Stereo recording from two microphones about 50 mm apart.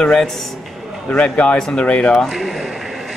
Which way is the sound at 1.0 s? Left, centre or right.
Left.